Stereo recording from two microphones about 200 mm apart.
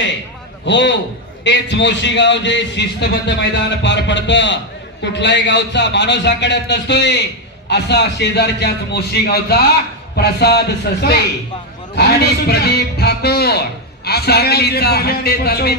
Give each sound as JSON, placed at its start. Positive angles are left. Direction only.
{"t": 0.7, "sound": "a man's voice", "side_deg": 60}